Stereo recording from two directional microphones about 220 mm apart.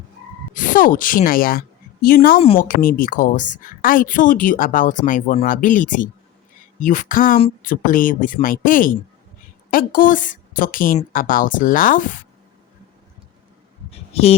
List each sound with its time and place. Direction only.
0.5 s a woman's voice: 35° left (ahead or behind)
13.9 s speech: 25° left (ahead or behind)